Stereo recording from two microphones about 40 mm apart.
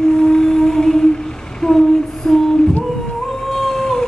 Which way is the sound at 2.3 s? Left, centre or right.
Centre.